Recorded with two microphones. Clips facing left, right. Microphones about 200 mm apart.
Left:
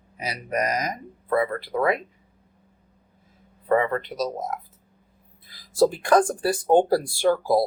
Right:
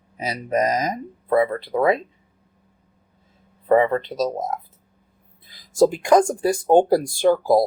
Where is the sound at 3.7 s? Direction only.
25° right (ahead or behind).